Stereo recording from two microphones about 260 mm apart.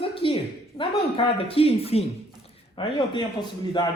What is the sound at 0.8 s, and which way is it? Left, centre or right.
A man's voice, left.